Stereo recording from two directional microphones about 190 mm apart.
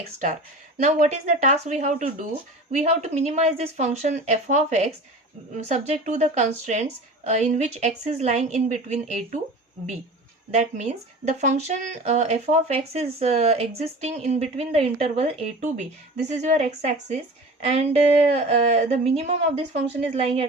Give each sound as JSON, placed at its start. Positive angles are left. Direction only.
{"t": 0.8, "sound": "speech", "side_deg": -40}
{"t": 10.5, "sound": "speech", "side_deg": -40}
{"t": 18.2, "sound": "speech", "side_deg": -35}